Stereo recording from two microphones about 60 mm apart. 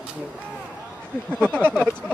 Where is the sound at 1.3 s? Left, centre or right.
Centre.